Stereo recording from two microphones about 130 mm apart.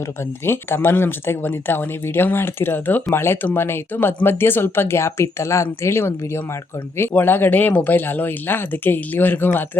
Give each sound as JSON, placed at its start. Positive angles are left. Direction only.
{"t": 0.4, "sound": "speech", "side_deg": 20}